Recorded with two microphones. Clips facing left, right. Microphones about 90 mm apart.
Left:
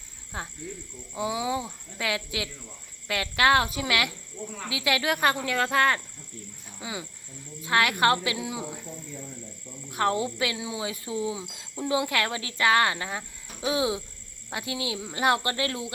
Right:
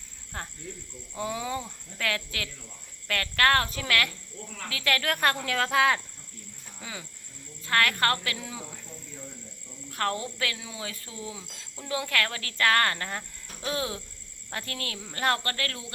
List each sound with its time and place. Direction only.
0.3 s speech: 10° left (ahead or behind)
6.7 s speech: 10° left (ahead or behind)
9.9 s speech: 15° left (ahead or behind)